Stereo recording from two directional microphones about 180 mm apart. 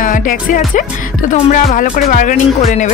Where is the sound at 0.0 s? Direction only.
50° left (ahead or behind).